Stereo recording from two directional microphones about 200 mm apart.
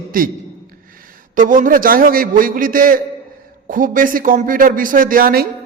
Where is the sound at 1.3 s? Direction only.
40° right (ahead or behind).